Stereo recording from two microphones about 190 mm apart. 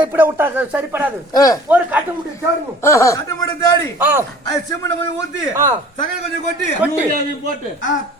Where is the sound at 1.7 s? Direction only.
10° right (ahead or behind).